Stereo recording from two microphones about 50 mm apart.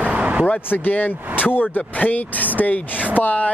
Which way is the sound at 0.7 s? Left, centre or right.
Left.